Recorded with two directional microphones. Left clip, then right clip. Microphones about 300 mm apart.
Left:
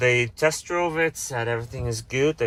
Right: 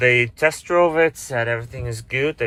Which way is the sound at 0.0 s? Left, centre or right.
Centre.